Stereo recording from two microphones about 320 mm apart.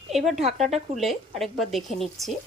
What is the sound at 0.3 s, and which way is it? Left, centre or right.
Speech, right.